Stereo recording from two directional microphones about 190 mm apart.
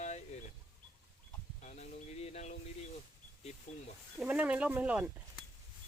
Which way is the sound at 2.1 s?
35° left (ahead or behind).